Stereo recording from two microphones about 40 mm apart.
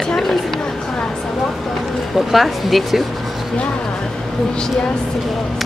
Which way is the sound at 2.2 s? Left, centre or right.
Centre.